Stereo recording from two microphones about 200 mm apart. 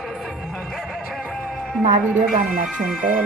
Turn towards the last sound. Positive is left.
turn(degrees=-5)  # may be behind; listen again after turning